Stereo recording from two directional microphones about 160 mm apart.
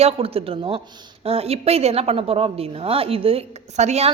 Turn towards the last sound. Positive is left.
turn(degrees=-45)  # may be behind; listen again after turning